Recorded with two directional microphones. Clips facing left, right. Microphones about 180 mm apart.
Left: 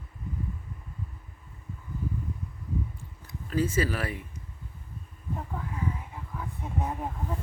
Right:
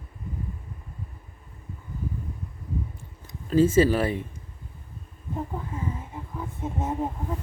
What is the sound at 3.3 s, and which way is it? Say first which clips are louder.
Speech: right 8 dB; 25° right (ahead or behind).